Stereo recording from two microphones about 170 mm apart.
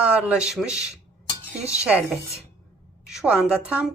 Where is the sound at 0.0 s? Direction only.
5° right (ahead or behind).